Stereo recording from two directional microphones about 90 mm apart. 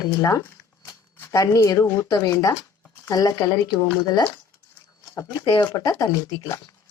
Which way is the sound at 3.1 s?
45° left (ahead or behind).